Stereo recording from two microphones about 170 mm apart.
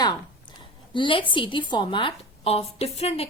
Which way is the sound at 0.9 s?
30° left (ahead or behind).